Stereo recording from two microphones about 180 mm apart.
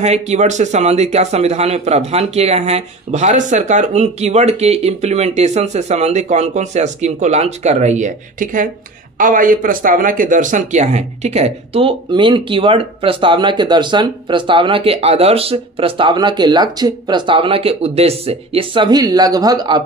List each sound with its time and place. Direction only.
0.0 s a man's voice: 40° right (ahead or behind); by 19.8 s 25° right (ahead or behind)